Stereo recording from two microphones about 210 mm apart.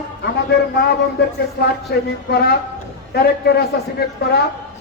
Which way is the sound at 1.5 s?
50° left (ahead or behind).